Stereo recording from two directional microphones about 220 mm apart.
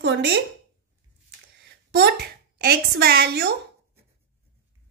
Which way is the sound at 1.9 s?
45° right (ahead or behind).